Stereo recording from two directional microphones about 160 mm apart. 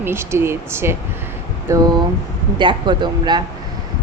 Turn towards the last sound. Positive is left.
turn(degrees=-30)  # may be behind; listen again after turning